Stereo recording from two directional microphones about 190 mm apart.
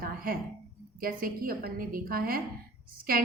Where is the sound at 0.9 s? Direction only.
50° right (ahead or behind).